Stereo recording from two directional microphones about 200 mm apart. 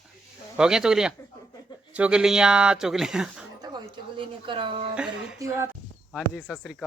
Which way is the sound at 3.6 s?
25° right (ahead or behind).